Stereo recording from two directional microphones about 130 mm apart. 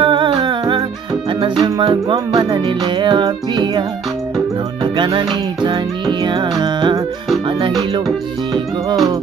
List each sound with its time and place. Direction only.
0.0 s music: 40° right (ahead or behind)
4.8 s music: 40° right (ahead or behind)